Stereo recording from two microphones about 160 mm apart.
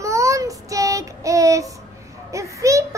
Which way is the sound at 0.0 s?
20° right (ahead or behind).